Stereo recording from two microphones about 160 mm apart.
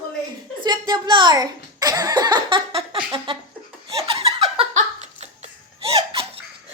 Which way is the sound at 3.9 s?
35° right (ahead or behind).